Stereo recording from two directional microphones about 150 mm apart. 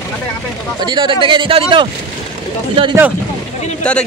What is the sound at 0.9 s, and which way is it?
Speech, 35° right (ahead or behind).